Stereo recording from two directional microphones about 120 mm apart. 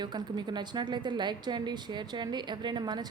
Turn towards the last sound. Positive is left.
turn(degrees=-35)  # may be behind; listen again after turning